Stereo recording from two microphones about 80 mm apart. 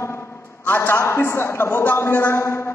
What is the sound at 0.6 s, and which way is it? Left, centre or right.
A man's voice, left.